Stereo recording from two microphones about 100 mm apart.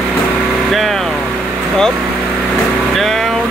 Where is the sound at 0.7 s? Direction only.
Centre (ahead or behind).